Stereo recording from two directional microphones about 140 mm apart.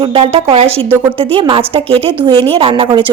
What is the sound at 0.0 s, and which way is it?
A woman's voice, 40° right (ahead or behind).